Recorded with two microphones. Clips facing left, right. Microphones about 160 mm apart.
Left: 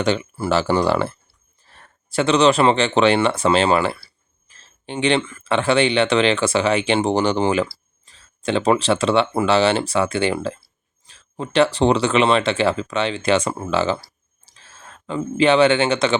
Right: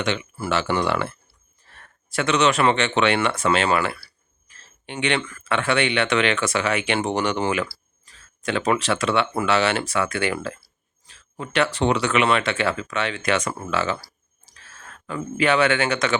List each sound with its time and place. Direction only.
0.0 s speech: 35° left (ahead or behind)